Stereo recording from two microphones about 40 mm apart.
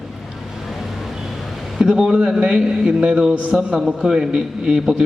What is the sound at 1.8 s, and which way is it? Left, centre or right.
A man's voice, centre.